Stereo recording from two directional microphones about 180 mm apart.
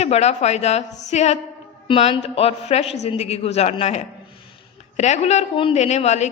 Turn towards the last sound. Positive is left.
turn(degrees=40)  # may be behind; listen again after turning